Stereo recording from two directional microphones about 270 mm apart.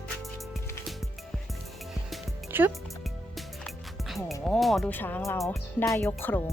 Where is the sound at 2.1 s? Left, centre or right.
Centre.